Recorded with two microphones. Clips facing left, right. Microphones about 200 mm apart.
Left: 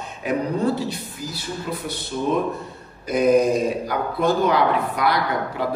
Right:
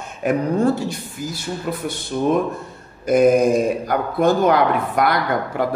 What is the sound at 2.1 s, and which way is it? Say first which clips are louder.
Speech: right 5 dB; 50° right (ahead or behind).